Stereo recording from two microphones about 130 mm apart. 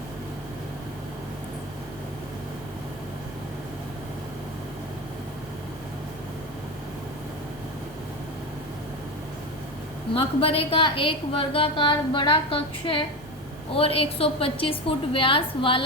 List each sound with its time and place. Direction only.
10.2 s a woman's voice: 45° left (ahead or behind)